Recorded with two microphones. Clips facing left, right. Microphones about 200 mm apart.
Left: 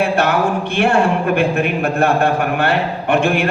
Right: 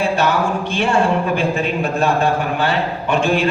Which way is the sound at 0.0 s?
60° left (ahead or behind).